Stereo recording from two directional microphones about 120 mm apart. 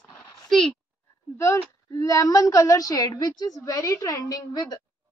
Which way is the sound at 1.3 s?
25° left (ahead or behind).